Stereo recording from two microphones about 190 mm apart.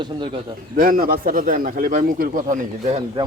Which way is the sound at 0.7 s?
45° right (ahead or behind).